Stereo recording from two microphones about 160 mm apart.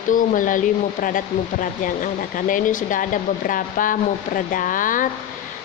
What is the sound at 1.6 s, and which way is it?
Speech, 55° left (ahead or behind).